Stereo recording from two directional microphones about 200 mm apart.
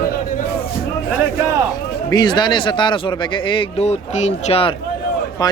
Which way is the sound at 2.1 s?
20° left (ahead or behind).